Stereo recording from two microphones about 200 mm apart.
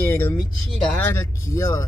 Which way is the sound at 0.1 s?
10° left (ahead or behind).